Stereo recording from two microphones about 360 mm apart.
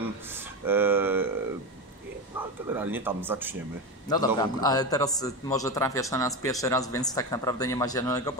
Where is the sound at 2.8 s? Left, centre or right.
Centre.